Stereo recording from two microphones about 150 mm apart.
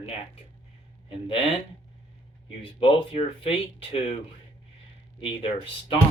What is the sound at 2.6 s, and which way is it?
Speech, 35° left (ahead or behind).